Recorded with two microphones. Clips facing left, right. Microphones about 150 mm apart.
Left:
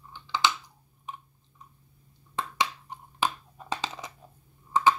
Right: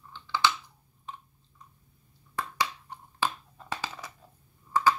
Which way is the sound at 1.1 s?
15° left (ahead or behind).